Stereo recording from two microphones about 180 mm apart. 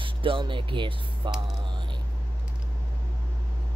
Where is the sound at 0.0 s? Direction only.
30° right (ahead or behind).